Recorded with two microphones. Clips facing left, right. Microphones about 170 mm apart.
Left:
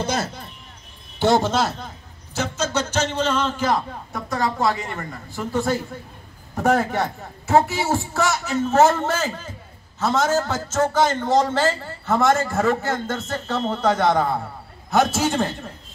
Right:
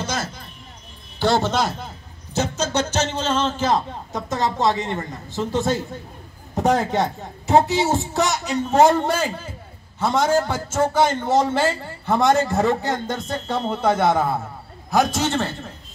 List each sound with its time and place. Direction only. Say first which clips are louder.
0.0 s speech: left 3 dB; 60° left (ahead or behind)
1.2 s speech: left 2 dB; 20° left (ahead or behind)
2.3 s a man's voice: right 2 dB; 30° right (ahead or behind); by 14.3 s 5° right (ahead or behind)
14.9 s a man's voice: even; 5° left (ahead or behind)